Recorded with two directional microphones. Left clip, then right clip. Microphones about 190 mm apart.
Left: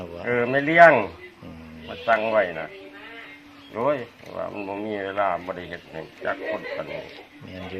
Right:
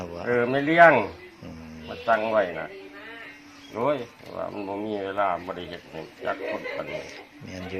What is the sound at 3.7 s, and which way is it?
Speech, 10° left (ahead or behind).